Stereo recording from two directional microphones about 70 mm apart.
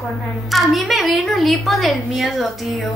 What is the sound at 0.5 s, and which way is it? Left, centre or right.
A woman's voice, centre.